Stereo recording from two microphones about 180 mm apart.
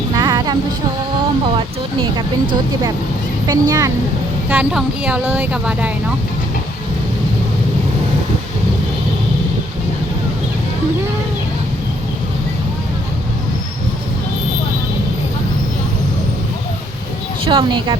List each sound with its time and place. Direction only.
0.1 s music: 20° right (ahead or behind)
1.5 s speech: 30° right (ahead or behind)
3.4 s speech: 20° right (ahead or behind)
4.4 s speech: 5° right (ahead or behind)
17.4 s speech: 30° right (ahead or behind)